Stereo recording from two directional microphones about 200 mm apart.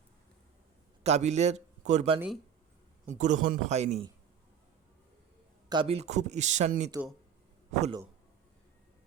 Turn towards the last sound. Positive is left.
turn(degrees=-35)  # may be behind; listen again after turning